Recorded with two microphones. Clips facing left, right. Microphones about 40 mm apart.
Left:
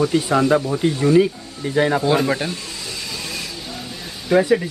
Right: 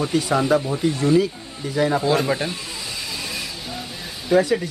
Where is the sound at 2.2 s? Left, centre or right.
Centre.